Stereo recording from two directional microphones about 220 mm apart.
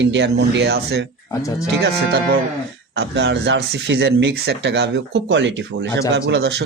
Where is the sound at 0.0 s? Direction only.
55° right (ahead or behind).